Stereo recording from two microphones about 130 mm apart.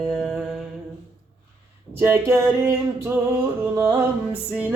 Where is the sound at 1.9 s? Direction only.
15° right (ahead or behind).